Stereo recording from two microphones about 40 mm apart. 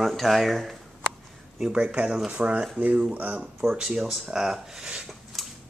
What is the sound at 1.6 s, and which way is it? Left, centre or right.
Speech, right.